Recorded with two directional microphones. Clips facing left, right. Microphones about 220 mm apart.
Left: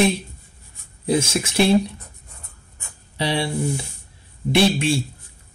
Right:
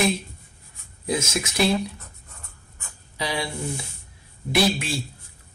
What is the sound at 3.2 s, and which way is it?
Speech, 30° left (ahead or behind).